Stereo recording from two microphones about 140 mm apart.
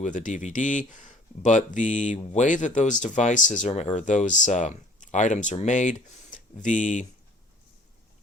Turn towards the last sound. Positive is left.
turn(degrees=65)  # may be behind; listen again after turning